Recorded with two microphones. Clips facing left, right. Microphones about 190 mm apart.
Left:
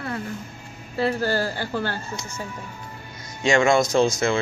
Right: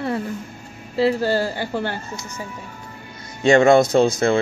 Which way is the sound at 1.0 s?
25° right (ahead or behind).